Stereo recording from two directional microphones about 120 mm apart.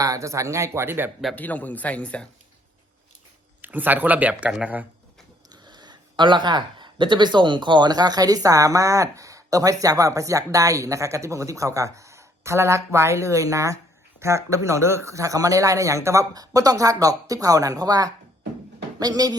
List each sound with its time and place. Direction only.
0.0 s speech: 25° right (ahead or behind)
1.4 s speech: 15° left (ahead or behind)
3.6 s speech: 15° right (ahead or behind)
5.6 s speech: 35° right (ahead or behind)